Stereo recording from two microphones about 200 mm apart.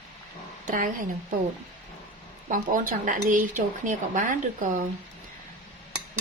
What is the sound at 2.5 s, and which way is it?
Speech, 40° right (ahead or behind).